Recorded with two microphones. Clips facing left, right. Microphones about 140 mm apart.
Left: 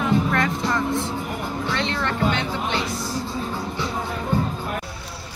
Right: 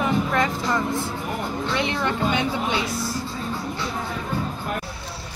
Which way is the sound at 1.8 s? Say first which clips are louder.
Even; 15° right (ahead or behind).